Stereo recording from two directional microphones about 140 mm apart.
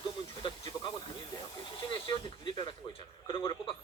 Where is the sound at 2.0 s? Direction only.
35° left (ahead or behind).